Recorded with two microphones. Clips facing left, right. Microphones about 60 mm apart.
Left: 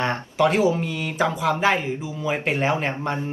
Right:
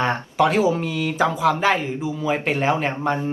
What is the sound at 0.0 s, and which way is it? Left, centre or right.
Speech, centre.